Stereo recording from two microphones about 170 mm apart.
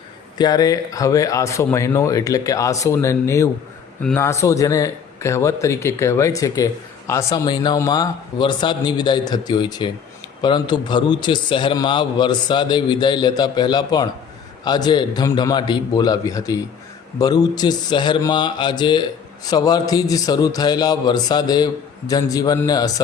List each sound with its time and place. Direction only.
0.3 s a man's voice: 25° left (ahead or behind)